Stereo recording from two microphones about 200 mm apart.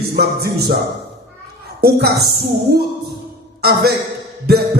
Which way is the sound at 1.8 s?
50° right (ahead or behind).